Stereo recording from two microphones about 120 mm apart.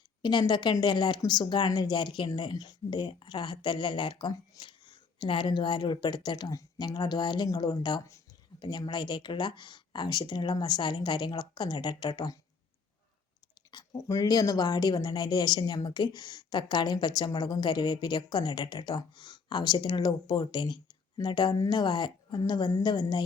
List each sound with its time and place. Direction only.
0.2 s speech: 40° left (ahead or behind)
13.7 s speech: 35° left (ahead or behind)